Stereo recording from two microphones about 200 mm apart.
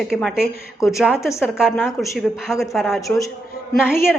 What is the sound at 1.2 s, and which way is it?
Speech, 15° left (ahead or behind).